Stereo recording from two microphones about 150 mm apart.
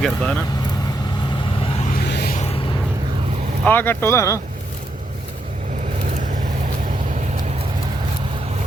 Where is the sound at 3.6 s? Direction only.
15° left (ahead or behind).